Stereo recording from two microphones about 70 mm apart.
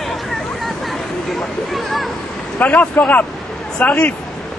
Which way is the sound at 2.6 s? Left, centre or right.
Left.